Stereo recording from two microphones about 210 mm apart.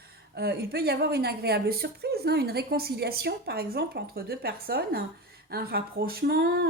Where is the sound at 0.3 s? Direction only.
50° right (ahead or behind).